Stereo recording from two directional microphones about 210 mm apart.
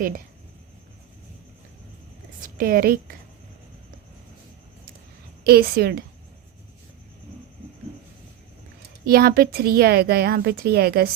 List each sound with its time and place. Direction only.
2.4 s a woman's voice: 45° right (ahead or behind)
5.5 s speech: 45° right (ahead or behind)
9.0 s speech: 45° right (ahead or behind)